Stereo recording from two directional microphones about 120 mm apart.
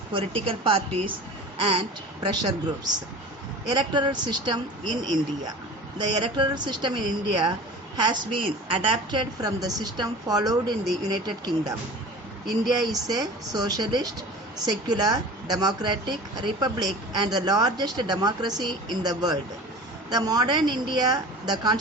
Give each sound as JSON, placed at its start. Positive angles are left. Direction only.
{"t": 0.1, "sound": "a woman's voice", "side_deg": -50}
{"t": 2.2, "sound": "speech", "side_deg": -35}
{"t": 12.8, "sound": "speech", "side_deg": -35}